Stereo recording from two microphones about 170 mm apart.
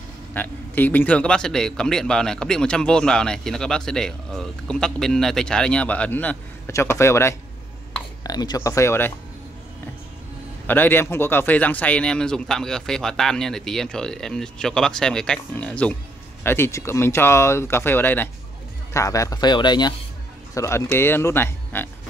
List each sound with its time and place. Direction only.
0.3 s a man's voice: 10° left (ahead or behind)
10.7 s a man's voice: 10° left (ahead or behind)